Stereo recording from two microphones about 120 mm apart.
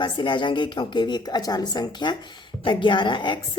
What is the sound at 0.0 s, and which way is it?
A woman's voice, 40° left (ahead or behind).